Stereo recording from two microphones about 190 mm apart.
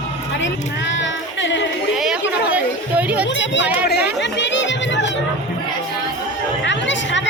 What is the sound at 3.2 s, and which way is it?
Speech, 70° left (ahead or behind).